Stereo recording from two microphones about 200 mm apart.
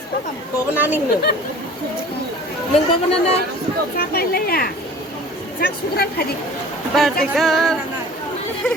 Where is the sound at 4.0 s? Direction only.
50° left (ahead or behind).